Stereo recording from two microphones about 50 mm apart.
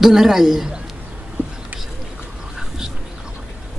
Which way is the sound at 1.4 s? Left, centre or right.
Right.